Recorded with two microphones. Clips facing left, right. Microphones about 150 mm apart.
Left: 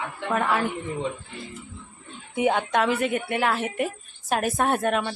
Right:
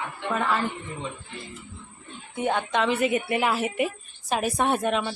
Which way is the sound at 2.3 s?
10° left (ahead or behind).